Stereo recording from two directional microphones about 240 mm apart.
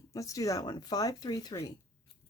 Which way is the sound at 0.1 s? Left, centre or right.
Centre.